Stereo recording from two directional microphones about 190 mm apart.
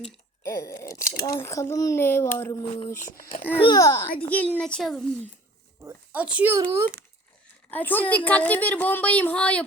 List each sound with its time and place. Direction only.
0.4 s a sound: 15° left (ahead or behind)
1.4 s a woman's voice: 15° left (ahead or behind)
3.0 s a child's voice: 45° left (ahead or behind)
3.6 s a woman's voice: 20° left (ahead or behind); by 6.8 s 15° right (ahead or behind)
7.7 s a woman's voice: 10° left (ahead or behind)